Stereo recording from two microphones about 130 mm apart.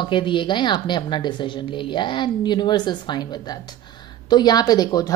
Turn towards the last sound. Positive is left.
turn(degrees=30)  # may be behind; listen again after turning